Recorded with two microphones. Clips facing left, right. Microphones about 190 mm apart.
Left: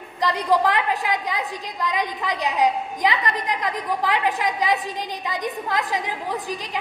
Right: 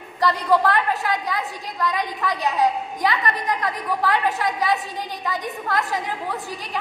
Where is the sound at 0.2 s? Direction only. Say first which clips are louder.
Right 1 dB; 15° left (ahead or behind).